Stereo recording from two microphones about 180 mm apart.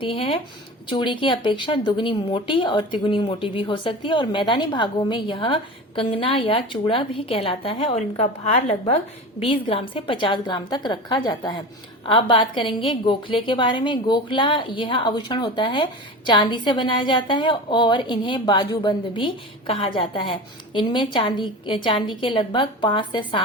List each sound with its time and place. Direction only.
0.0 s a woman's voice: 30° left (ahead or behind)